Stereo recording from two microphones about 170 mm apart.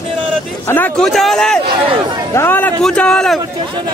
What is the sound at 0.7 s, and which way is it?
A man's voice, 10° left (ahead or behind).